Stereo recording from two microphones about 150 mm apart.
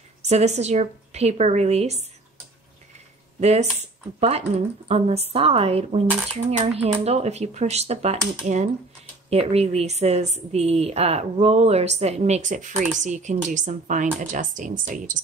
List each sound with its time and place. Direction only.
0.2 s a woman's voice: 50° right (ahead or behind)
3.3 s a woman's voice: 50° right (ahead or behind)